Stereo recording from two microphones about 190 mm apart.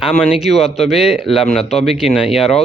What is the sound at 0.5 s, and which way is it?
Speech, 35° left (ahead or behind).